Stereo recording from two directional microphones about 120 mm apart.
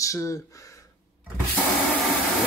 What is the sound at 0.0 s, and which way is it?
Speech, 25° left (ahead or behind).